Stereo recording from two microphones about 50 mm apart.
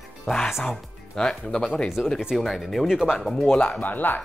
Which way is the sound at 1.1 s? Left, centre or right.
Centre.